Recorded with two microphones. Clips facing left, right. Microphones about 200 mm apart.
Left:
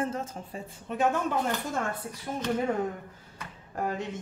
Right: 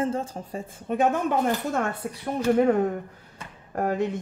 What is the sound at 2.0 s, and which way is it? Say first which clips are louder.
Speech: right 7 dB; 75° right (ahead or behind).